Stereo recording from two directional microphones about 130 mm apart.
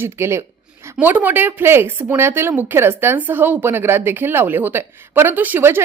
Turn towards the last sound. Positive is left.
turn(degrees=-15)  # may be behind; listen again after turning